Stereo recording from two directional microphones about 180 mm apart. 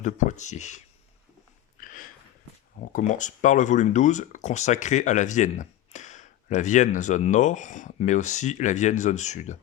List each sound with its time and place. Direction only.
0.0 s speech: 40° left (ahead or behind)
1.8 s a sound: 50° left (ahead or behind)
3.0 s speech: 45° left (ahead or behind)